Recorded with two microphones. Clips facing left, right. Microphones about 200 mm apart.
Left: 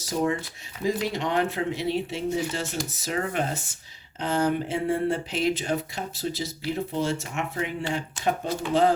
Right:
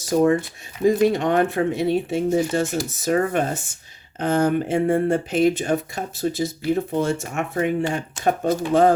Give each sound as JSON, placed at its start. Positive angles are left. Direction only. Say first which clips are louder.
{"t": 0.0, "sound": "speech", "louder": "right 8 dB", "side_deg": -50}